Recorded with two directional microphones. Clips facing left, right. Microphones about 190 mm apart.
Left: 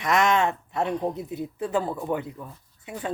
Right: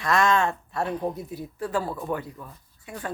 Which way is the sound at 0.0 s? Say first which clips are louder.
Left 1 dB; 20° left (ahead or behind).